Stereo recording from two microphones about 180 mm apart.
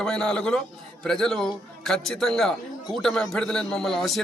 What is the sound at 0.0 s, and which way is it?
A man's voice, 5° left (ahead or behind).